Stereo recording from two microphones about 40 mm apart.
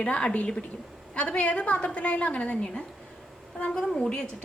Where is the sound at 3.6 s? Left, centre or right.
Centre.